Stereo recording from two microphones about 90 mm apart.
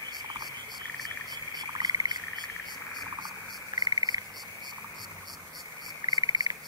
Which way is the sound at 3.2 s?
50° right (ahead or behind).